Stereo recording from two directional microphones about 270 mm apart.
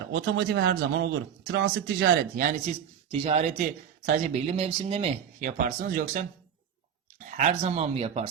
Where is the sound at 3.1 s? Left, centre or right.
Right.